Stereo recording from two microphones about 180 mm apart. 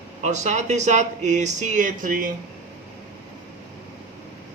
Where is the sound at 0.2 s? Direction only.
40° right (ahead or behind).